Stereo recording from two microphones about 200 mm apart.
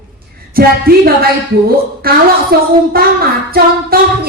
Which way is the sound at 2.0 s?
50° right (ahead or behind).